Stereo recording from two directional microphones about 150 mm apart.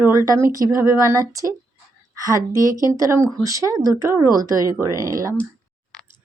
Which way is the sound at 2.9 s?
20° right (ahead or behind).